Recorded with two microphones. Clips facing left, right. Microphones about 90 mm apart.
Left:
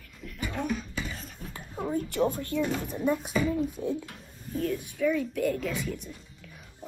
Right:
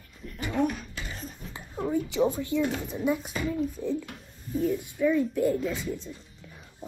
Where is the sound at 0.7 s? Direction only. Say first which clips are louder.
Left 2 dB; 40° right (ahead or behind).